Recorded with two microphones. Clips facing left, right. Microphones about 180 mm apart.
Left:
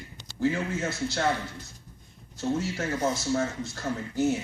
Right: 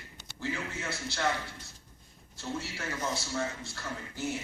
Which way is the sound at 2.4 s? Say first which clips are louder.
Left 9 dB; 45° left (ahead or behind).